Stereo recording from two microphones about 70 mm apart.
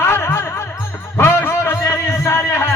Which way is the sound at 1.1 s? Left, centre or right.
Left.